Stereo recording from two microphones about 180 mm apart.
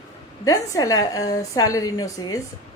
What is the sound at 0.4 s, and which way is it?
A woman's voice, 20° left (ahead or behind).